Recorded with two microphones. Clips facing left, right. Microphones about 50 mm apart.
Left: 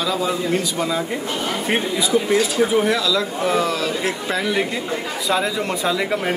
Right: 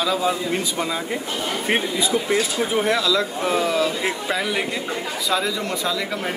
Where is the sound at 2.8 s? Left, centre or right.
Centre.